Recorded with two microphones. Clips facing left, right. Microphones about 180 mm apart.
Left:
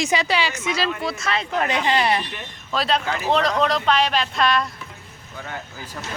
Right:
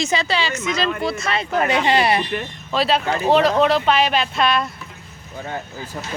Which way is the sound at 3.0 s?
30° right (ahead or behind).